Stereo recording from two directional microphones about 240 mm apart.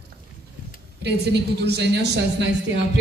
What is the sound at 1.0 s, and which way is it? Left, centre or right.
A woman's voice, right.